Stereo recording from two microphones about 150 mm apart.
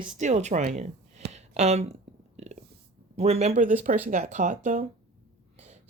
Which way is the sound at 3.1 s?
45° right (ahead or behind).